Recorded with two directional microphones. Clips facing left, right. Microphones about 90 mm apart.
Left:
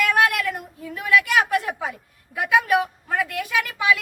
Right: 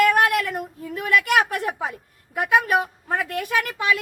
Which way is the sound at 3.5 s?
50° right (ahead or behind).